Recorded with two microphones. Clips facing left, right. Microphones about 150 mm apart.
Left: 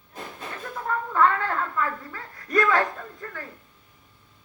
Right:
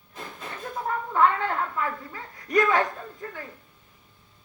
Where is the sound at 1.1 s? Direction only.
20° right (ahead or behind).